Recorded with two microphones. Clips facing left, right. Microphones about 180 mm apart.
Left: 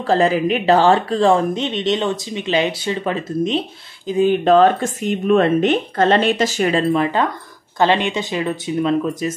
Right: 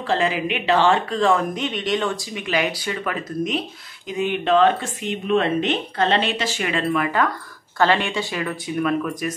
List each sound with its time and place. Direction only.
0.0 s speech: 40° left (ahead or behind); by 9.3 s 25° left (ahead or behind)